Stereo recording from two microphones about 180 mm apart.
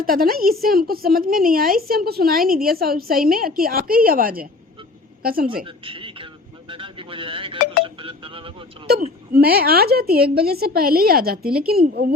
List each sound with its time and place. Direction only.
0.0 s a woman's voice: 55° right (ahead or behind)
5.6 s a sound: 30° right (ahead or behind)
9.3 s a woman's voice: 60° right (ahead or behind)